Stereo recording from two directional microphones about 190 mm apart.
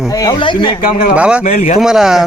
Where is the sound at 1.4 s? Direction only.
40° left (ahead or behind).